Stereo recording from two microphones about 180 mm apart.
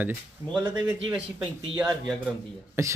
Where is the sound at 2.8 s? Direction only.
15° right (ahead or behind).